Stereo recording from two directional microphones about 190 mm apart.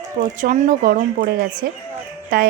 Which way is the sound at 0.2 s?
45° right (ahead or behind).